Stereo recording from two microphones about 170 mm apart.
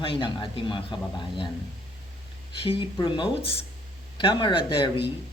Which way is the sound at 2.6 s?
30° left (ahead or behind).